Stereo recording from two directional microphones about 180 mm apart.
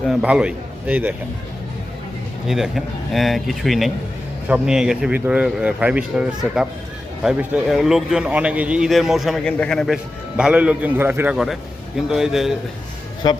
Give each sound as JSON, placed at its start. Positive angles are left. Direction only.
{"t": 0.0, "sound": "a man's voice", "side_deg": 0}
{"t": 2.5, "sound": "a man's voice", "side_deg": 0}
{"t": 13.2, "sound": "speech", "side_deg": 25}